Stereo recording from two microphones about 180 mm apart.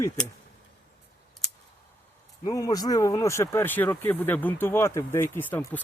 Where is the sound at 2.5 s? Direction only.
20° left (ahead or behind).